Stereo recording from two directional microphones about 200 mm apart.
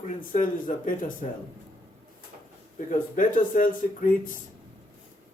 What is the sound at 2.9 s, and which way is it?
Speech, 40° left (ahead or behind).